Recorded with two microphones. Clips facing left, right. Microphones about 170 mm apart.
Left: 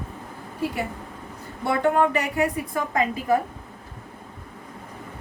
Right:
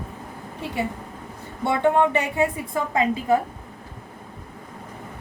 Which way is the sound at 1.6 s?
25° right (ahead or behind).